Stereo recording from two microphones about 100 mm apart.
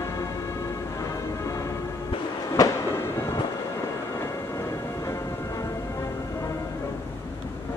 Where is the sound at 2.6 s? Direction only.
40° left (ahead or behind).